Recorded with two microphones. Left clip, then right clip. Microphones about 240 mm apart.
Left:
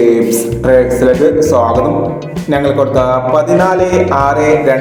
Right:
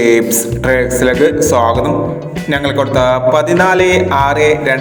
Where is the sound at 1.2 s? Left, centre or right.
Right.